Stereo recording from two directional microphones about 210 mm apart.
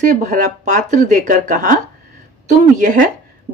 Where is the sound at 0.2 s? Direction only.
35° right (ahead or behind).